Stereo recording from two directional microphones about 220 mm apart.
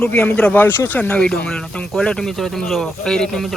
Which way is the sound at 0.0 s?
10° left (ahead or behind).